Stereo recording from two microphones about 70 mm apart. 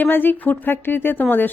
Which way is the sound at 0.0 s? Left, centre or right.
Left.